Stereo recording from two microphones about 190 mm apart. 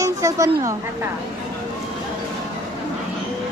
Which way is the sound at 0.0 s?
15° right (ahead or behind).